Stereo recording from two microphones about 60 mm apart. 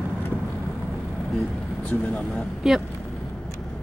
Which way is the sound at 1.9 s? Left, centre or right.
Left.